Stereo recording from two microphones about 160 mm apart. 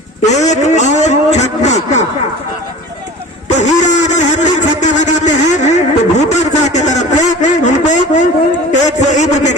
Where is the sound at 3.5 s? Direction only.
50° left (ahead or behind).